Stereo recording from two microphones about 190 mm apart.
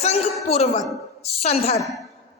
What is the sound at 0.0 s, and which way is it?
A woman's voice, 35° left (ahead or behind).